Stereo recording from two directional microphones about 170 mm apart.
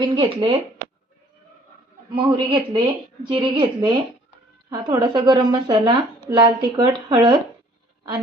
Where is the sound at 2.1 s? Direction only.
30° right (ahead or behind).